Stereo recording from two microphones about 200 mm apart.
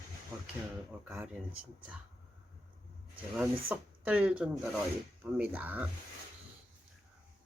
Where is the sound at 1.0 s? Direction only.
5° right (ahead or behind).